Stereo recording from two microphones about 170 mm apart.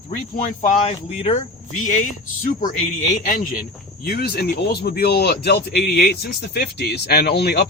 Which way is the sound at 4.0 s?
65° left (ahead or behind).